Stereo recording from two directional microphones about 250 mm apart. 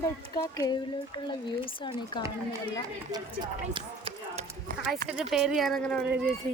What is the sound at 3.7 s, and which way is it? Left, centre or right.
Run, right.